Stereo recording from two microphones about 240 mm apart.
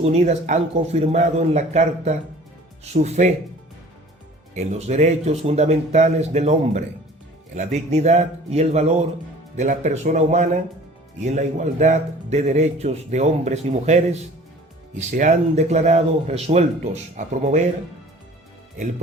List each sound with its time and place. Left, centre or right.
0.0 s speech: right
4.5 s speech: right